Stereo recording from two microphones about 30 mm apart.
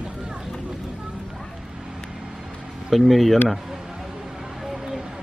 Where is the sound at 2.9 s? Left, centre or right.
Centre.